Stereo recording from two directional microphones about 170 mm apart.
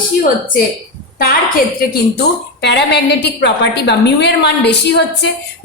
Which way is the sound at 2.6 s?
90° left.